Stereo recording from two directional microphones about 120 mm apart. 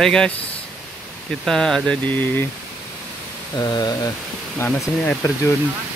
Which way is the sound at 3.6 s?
35° left (ahead or behind).